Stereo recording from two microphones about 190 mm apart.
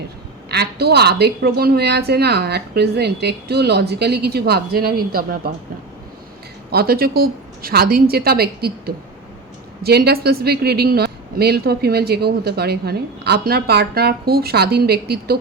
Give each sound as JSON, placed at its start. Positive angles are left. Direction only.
{"t": 0.5, "sound": "a woman's voice", "side_deg": -60}
{"t": 6.7, "sound": "a woman's voice", "side_deg": -55}
{"t": 9.8, "sound": "a woman's voice", "side_deg": -55}